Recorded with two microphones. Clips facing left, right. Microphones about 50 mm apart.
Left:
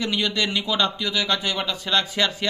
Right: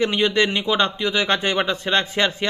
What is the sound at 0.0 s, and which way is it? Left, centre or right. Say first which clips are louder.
Speech: right 5 dB; right.